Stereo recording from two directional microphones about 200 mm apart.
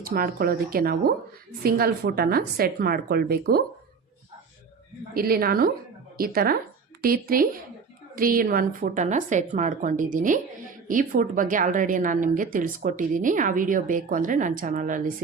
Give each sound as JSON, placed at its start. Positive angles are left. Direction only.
{"t": 0.0, "sound": "a woman's voice", "side_deg": -45}
{"t": 5.1, "sound": "a woman's voice", "side_deg": -50}